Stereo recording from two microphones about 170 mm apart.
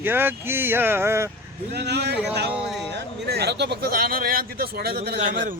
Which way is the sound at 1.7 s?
75° right (ahead or behind).